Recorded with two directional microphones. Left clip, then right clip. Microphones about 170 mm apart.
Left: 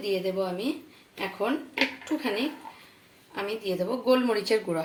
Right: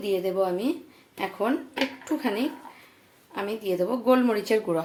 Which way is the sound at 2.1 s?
30° right (ahead or behind).